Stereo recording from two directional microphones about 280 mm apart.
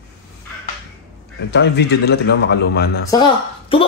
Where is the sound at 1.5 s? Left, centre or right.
Left.